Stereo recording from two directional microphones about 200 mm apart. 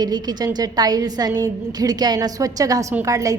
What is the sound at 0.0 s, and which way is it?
A woman's voice, 20° right (ahead or behind).